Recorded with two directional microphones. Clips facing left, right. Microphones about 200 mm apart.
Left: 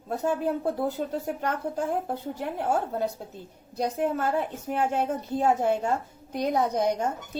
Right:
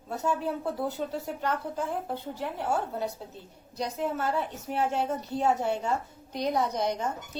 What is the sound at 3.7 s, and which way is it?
A woman's voice, 50° left (ahead or behind).